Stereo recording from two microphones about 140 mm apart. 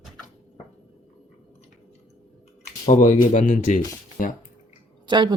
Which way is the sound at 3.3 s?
60° left (ahead or behind).